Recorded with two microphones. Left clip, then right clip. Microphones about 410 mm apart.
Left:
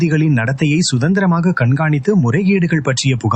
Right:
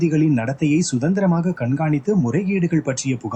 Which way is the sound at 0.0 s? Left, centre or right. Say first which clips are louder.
Left 2 dB; left.